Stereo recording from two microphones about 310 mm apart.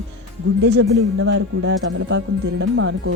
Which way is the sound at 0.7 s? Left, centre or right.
Right.